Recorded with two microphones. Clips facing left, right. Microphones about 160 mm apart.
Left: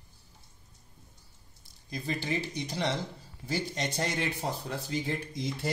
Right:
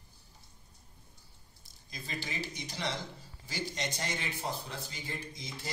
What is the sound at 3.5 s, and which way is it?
Speech, 30° left (ahead or behind).